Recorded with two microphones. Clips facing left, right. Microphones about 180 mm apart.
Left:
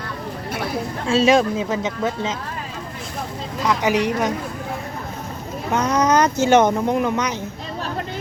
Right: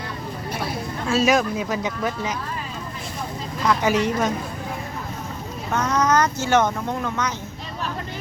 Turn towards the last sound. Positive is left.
turn(degrees=15)  # may be behind; listen again after turning